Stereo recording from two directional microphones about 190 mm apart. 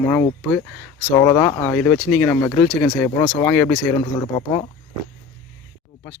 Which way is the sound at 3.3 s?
10° left (ahead or behind).